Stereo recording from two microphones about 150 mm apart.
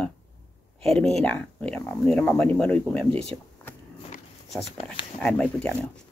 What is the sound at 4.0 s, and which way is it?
Walk, 45° left (ahead or behind).